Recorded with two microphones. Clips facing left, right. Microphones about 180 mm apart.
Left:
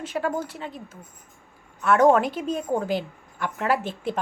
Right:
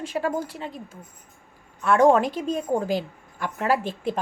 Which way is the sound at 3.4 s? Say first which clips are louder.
Even; 35° right (ahead or behind).